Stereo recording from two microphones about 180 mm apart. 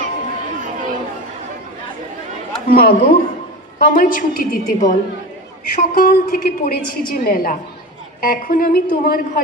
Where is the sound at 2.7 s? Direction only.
55° left (ahead or behind).